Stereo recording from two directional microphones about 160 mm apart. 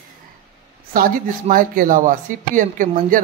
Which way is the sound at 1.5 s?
60° right (ahead or behind).